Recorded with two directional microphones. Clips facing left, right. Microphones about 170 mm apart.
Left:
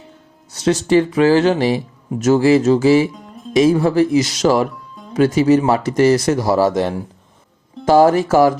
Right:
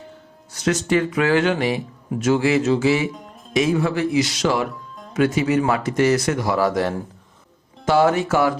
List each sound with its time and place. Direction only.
0.5 s speech: 30° left (ahead or behind)
7.9 s speech: 35° left (ahead or behind)